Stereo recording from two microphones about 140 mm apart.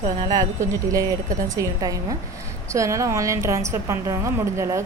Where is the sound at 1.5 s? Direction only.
25° right (ahead or behind).